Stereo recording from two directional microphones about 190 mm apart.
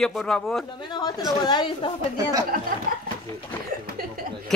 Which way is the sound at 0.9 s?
20° left (ahead or behind).